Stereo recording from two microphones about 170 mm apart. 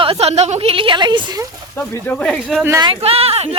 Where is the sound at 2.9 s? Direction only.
35° right (ahead or behind).